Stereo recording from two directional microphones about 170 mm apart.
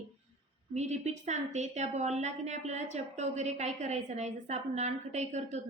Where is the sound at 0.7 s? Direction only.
40° right (ahead or behind).